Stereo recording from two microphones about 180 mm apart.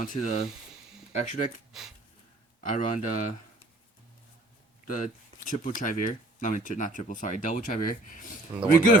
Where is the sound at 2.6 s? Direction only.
45° left (ahead or behind).